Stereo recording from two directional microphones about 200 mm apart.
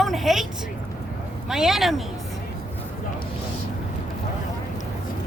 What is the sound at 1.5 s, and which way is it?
Speech, centre (ahead or behind).